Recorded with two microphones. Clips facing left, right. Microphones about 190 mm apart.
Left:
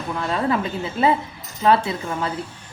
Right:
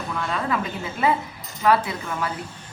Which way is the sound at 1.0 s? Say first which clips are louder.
Left 3 dB; 30° left (ahead or behind).